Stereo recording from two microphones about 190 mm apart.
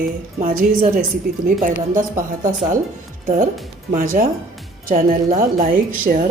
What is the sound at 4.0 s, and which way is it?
A woman's voice, 45° right (ahead or behind).